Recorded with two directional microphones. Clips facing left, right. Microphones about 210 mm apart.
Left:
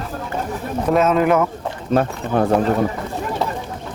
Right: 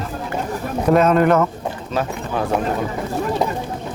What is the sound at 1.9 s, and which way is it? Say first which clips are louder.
Speech: left 6 dB; 55° left (ahead or behind).